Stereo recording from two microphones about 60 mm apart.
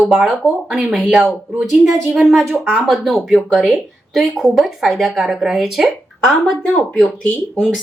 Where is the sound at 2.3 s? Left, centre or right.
Centre.